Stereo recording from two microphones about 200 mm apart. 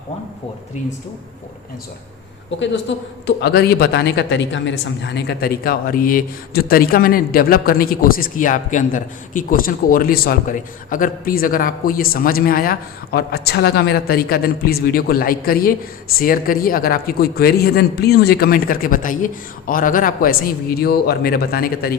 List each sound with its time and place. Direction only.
2.9 s a man's voice: 65° left (ahead or behind)
3.2 s speech: 55° left (ahead or behind)